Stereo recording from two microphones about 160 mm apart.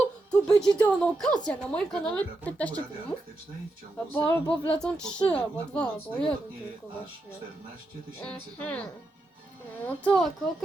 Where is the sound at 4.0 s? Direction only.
5° left (ahead or behind).